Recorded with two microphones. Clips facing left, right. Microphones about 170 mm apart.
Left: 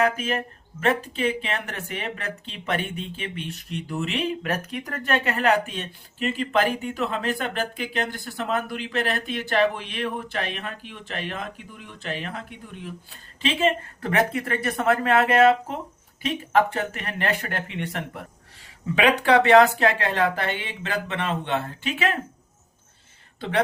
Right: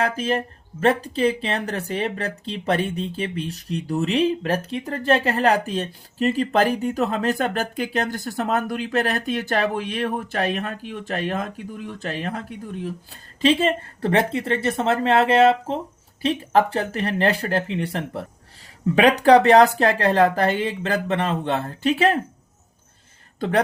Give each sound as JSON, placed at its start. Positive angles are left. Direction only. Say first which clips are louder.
{"t": 0.0, "sound": "speech", "louder": "right 1 dB", "side_deg": -35}
{"t": 13.4, "sound": "a woman's voice", "louder": "right 4 dB", "side_deg": -35}